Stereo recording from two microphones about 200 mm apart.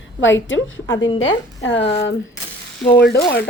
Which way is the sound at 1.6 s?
65° left (ahead or behind).